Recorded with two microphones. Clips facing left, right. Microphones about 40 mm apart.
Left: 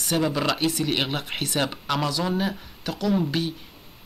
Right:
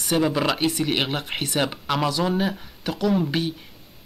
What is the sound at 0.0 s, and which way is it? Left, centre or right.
Speech, centre.